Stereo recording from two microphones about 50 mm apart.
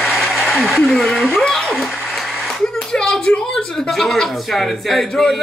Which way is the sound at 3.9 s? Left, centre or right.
Centre.